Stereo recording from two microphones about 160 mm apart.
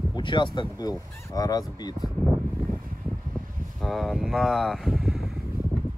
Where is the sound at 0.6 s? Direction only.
20° left (ahead or behind).